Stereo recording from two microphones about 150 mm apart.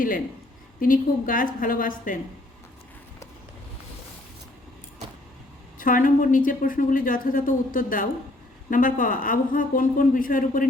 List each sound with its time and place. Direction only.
0.8 s a woman's voice: 65° left (ahead or behind)
5.8 s a woman's voice: 65° left (ahead or behind)